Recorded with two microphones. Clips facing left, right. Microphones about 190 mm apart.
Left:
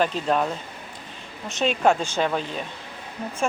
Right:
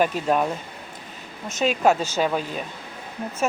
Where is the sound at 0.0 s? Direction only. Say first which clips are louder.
Right 1 dB; 10° right (ahead or behind).